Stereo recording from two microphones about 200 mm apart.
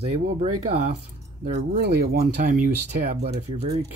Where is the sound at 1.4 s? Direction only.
50° right (ahead or behind).